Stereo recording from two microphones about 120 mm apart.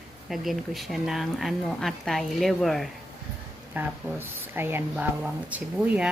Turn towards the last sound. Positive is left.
turn(degrees=-15)  # may be behind; listen again after turning